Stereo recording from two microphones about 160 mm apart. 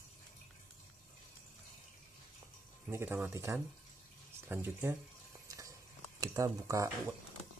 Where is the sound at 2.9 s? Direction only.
15° right (ahead or behind).